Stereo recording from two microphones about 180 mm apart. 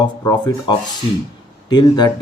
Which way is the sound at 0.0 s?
25° left (ahead or behind).